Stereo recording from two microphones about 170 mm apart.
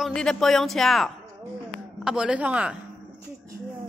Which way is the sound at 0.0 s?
5° left (ahead or behind).